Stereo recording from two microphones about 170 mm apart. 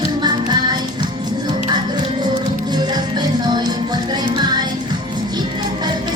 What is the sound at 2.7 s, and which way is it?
Music, 25° right (ahead or behind).